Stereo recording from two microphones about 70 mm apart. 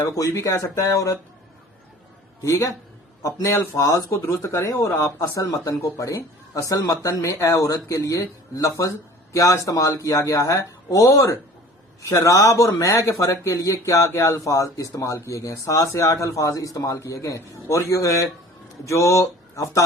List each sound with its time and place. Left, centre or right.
0.0 s speech: left
2.4 s speech: left
3.5 s speech: left